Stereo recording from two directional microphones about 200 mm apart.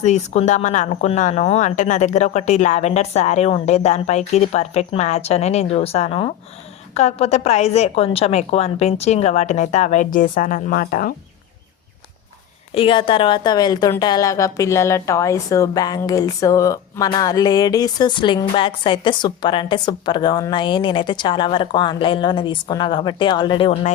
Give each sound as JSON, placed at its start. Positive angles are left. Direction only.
{"t": 0.0, "sound": "speech", "side_deg": 35}
{"t": 12.7, "sound": "a woman's voice", "side_deg": 25}